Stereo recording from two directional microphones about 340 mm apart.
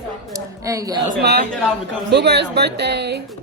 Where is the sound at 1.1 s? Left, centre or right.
Right.